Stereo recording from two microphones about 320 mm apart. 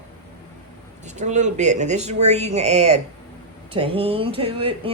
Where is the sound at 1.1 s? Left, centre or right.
Right.